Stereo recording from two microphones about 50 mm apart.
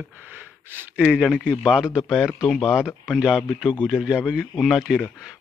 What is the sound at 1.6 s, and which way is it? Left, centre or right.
Speech, centre.